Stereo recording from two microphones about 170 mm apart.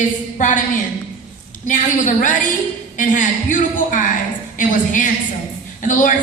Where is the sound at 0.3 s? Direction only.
50° left (ahead or behind).